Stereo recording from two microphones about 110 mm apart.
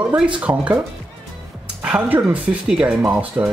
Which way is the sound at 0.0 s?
10° right (ahead or behind).